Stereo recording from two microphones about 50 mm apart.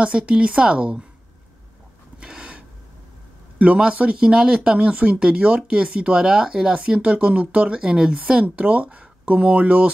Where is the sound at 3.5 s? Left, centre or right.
Right.